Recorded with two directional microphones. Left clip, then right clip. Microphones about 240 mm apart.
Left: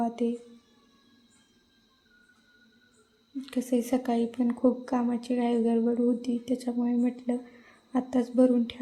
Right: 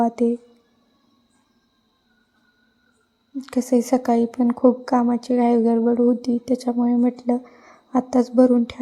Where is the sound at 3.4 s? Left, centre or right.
Right.